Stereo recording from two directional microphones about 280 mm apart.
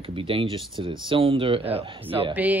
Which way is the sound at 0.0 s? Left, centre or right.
Centre.